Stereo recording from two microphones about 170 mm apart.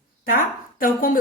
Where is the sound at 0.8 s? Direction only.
55° left (ahead or behind).